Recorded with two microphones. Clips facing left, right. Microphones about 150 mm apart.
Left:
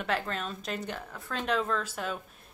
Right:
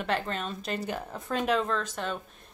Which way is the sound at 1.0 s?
20° right (ahead or behind).